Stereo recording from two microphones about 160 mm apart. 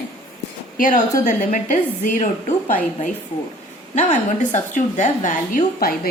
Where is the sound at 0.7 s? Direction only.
55° left (ahead or behind).